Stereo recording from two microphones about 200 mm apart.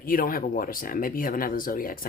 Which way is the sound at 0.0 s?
45° left (ahead or behind).